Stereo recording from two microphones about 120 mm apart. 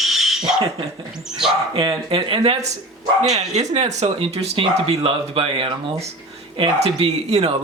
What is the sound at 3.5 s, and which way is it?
Speech, 65° right (ahead or behind).